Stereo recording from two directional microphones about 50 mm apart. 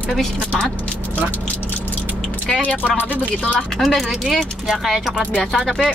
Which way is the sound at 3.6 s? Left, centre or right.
Centre.